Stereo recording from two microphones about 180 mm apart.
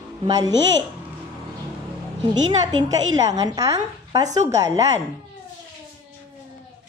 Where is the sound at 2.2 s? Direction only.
25° right (ahead or behind).